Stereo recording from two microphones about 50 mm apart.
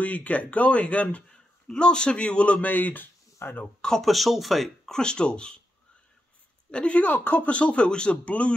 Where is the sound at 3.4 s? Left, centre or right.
Left.